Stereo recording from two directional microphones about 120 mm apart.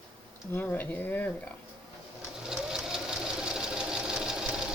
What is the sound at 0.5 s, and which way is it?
Speech, 15° left (ahead or behind).